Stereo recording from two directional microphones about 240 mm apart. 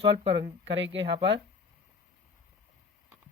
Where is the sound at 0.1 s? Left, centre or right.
Right.